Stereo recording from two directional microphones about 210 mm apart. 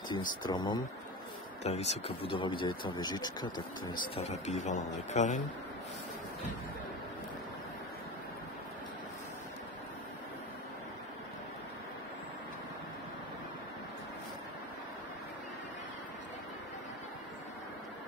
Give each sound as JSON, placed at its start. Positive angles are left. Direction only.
{"t": 0.4, "sound": "speech", "side_deg": 20}
{"t": 1.6, "sound": "speech", "side_deg": 30}
{"t": 4.1, "sound": "speech", "side_deg": 30}